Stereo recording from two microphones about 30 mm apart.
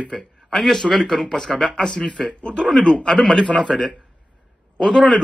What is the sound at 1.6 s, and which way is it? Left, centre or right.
Speech, left.